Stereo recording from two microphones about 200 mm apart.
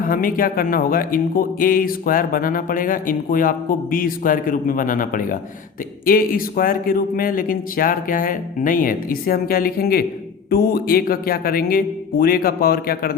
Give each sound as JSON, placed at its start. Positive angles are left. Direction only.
{"t": 0.0, "sound": "speech", "side_deg": 45}